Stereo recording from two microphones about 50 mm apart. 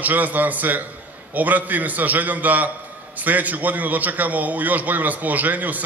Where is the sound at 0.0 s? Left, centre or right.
Right.